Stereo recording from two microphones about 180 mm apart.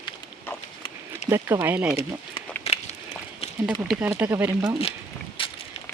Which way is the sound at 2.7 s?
35° left (ahead or behind).